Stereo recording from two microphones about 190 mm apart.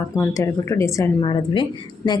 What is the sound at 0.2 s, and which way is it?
A woman's voice, 15° left (ahead or behind).